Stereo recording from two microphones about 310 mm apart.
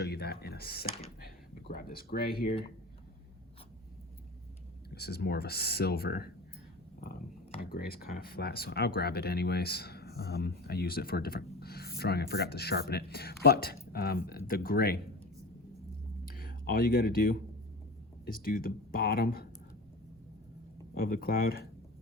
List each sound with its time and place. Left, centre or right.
0.0 s speech: left
4.9 s speech: left
7.6 s speech: left
16.2 s a sound: left
18.3 s speech: left
20.9 s speech: left